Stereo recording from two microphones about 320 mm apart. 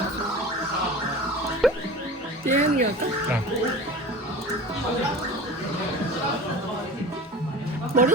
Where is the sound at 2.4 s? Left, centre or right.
Right.